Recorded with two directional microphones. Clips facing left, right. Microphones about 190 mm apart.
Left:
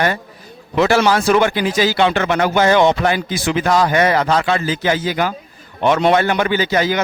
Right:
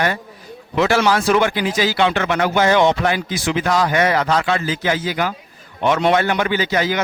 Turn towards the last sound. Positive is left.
turn(degrees=40)  # may be behind; listen again after turning